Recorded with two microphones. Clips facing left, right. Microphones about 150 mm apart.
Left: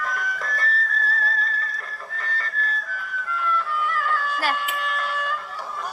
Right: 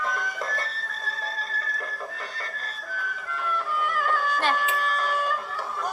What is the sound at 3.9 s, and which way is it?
Music, 45° right (ahead or behind).